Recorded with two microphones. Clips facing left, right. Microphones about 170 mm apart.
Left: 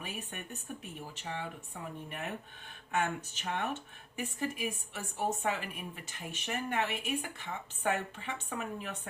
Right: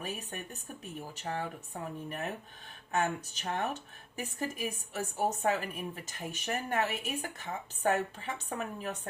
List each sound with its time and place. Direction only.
0.0 s a woman's voice: 40° right (ahead or behind)